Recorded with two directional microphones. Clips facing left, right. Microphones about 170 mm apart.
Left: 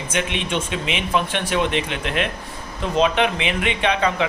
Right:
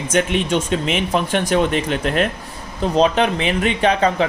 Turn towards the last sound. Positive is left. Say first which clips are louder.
# right 4 dB
turn(degrees=-40)  # may be behind; listen again after turning